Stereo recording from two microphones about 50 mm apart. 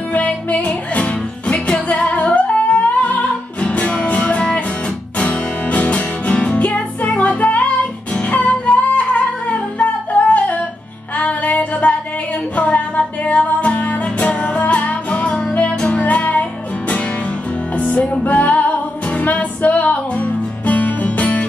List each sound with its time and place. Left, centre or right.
0.1 s music: left
17.7 s music: left